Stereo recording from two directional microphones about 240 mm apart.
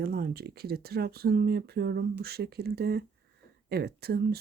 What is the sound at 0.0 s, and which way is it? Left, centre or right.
Speech, right.